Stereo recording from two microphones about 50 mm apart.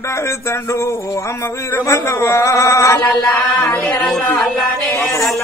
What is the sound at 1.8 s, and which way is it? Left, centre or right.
Speech, left.